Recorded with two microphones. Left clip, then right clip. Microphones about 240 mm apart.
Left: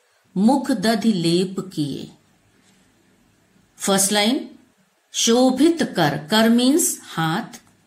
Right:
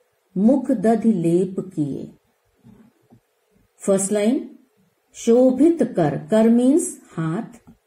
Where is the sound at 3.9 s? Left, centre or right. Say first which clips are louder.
Even; left.